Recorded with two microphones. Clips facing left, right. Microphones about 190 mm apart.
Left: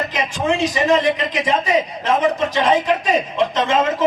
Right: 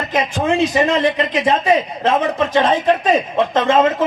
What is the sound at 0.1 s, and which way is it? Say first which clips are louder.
Speech: right 3 dB; 55° right (ahead or behind).